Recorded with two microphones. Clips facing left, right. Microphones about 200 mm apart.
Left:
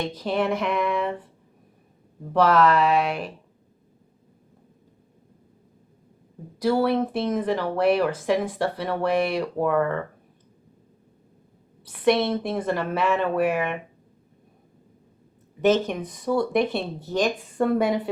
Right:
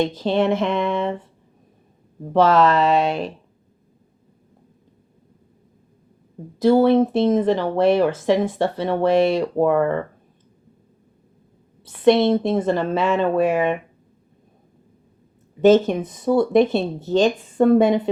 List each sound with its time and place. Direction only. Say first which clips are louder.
0.0 s speech: right 6 dB; 25° right (ahead or behind)
2.3 s speech: right 3 dB; 25° right (ahead or behind)
6.6 s speech: right 7 dB; 25° right (ahead or behind)
11.8 s speech: right 6 dB; 25° right (ahead or behind)
15.6 s speech: right 7 dB; 25° right (ahead or behind)